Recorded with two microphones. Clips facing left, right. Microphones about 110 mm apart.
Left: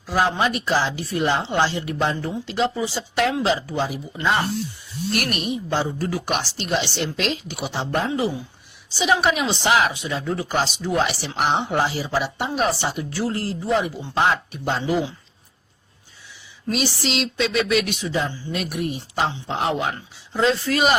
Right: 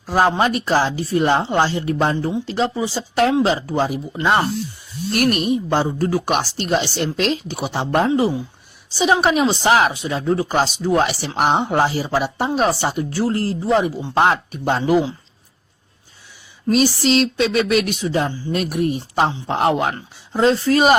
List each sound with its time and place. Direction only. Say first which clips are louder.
0.0 s a woman's voice: right 4 dB; 45° right (ahead or behind)
8.1 s a woman's voice: right 6 dB; 30° right (ahead or behind)
14.2 s speech: right 4 dB; 50° right (ahead or behind)
16.6 s speech: right 8 dB; 40° right (ahead or behind)
20.3 s a woman's voice: right 5 dB; 40° right (ahead or behind)